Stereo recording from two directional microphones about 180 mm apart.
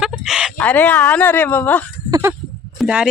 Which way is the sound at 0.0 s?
5° right (ahead or behind).